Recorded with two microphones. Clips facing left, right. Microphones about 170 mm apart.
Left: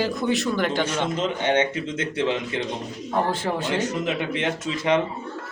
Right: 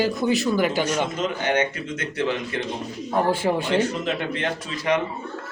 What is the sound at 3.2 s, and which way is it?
Speech, 10° right (ahead or behind).